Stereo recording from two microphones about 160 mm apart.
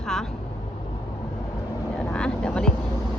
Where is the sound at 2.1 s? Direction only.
5° left (ahead or behind).